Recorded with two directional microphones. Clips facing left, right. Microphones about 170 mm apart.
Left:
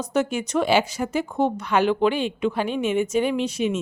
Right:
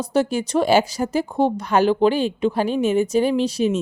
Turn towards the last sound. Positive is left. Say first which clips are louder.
# right 4 dB
turn(degrees=-35)  # may be behind; listen again after turning